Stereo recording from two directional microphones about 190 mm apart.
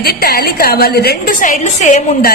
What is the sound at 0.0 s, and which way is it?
A woman's voice, 55° left (ahead or behind).